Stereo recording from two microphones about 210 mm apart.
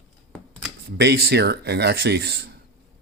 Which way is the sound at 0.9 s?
50° right (ahead or behind).